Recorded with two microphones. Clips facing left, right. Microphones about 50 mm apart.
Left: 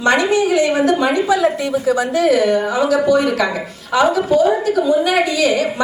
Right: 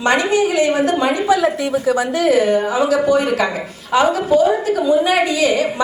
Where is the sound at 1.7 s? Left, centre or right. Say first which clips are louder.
Left 1 dB; right.